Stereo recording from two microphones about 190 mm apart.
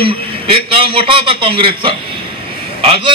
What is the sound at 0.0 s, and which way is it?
A man's voice, 30° right (ahead or behind).